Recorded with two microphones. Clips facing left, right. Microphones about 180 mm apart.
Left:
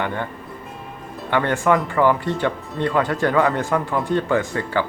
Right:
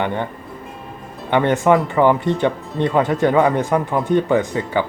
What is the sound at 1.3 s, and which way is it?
Speech, 20° right (ahead or behind).